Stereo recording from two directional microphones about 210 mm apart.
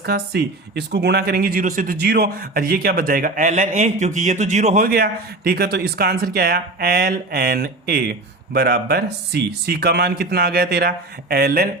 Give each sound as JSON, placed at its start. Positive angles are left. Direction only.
{"t": 0.0, "sound": "speech", "side_deg": -50}